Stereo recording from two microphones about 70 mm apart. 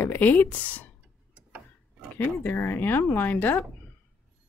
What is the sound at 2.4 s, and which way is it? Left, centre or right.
Speech, left.